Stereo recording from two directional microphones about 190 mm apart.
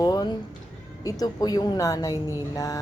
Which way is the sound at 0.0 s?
20° left (ahead or behind).